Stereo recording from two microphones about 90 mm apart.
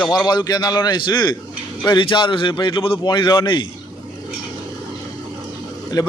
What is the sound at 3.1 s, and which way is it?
Speech, 55° left (ahead or behind).